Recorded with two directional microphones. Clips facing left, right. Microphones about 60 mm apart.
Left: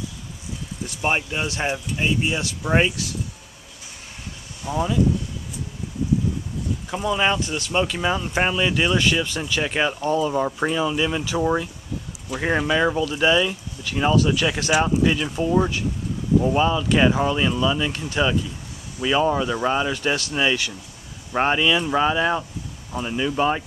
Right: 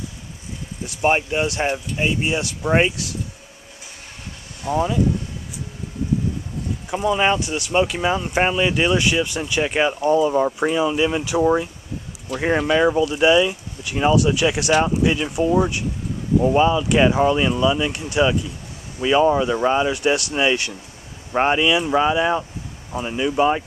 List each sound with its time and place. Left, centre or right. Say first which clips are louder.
0.8 s speech: right 5 dB; centre
4.6 s speech: right 3 dB; centre
6.9 s speech: right 3 dB; centre
19.0 s speech: right 4 dB; centre